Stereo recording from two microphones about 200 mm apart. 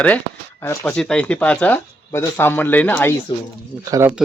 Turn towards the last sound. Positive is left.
turn(degrees=-10)  # may be behind; listen again after turning